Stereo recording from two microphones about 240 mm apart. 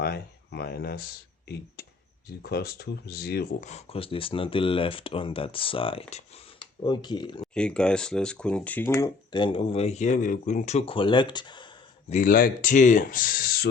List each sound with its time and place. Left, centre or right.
0.0 s speech: left
2.4 s speech: left; by 7.4 s centre
7.4 s speech: centre
12.0 s speech: left